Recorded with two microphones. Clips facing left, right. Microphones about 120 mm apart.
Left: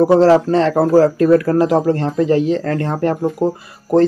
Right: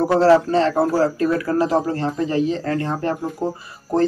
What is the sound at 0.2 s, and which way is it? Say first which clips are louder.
Speech: left 3 dB; 40° left (ahead or behind).